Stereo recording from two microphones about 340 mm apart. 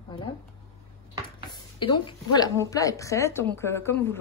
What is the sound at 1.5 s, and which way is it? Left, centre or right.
A woman's voice, centre.